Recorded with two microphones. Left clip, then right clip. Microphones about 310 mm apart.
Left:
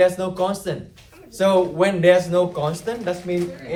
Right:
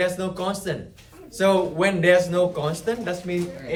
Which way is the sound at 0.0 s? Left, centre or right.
Centre.